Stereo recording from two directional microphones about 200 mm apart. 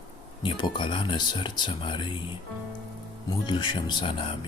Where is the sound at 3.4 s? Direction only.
25° left (ahead or behind).